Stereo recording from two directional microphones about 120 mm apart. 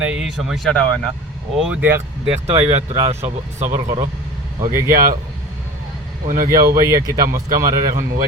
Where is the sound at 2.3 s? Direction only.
60° right (ahead or behind); by 3.9 s 80° right.